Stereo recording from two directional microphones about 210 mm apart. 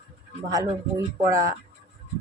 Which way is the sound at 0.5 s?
15° right (ahead or behind).